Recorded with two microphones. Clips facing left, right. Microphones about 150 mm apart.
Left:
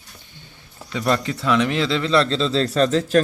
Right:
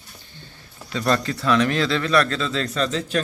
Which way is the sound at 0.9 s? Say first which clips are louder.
Left 1 dB; 15° left (ahead or behind).